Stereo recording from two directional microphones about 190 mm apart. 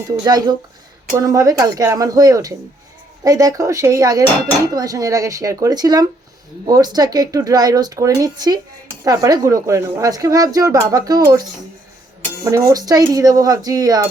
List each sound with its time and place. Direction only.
0.3 s speech: 20° right (ahead or behind)
12.5 s speech: 15° right (ahead or behind)